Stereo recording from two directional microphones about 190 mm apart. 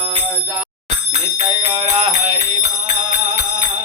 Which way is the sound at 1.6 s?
30° right (ahead or behind).